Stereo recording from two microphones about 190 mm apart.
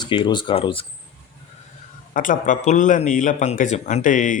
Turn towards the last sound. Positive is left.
turn(degrees=45)  # may be behind; listen again after turning